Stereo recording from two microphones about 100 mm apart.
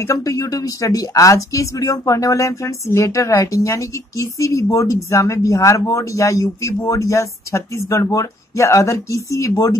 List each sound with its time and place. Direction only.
0.0 s speech: 30° left (ahead or behind)